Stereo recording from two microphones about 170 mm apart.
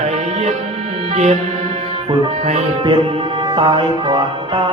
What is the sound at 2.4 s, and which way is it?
Tabla, 35° right (ahead or behind).